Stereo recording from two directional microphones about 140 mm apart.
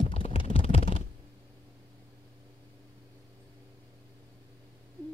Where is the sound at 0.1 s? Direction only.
40° left (ahead or behind).